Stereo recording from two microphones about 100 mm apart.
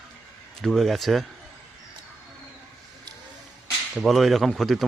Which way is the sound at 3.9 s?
Centre (ahead or behind).